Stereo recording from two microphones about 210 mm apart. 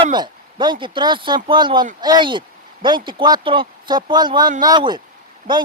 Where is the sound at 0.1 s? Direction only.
20° right (ahead or behind).